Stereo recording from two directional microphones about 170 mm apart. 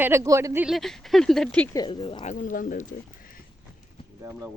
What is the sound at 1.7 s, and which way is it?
Speech, 25° left (ahead or behind).